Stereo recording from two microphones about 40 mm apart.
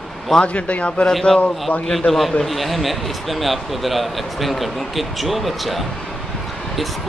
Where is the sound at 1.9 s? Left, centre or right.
Centre.